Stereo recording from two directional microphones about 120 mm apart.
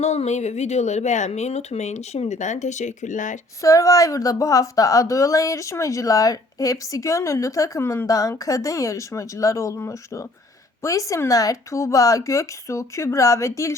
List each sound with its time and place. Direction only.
0.0 s speech: 65° left (ahead or behind); by 3.3 s 90° left
3.6 s a woman's voice: 25° left (ahead or behind)